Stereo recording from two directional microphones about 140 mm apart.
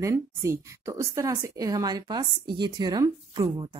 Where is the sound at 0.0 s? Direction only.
20° right (ahead or behind).